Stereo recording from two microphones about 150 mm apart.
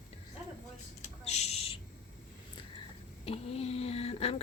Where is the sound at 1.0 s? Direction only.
45° left (ahead or behind).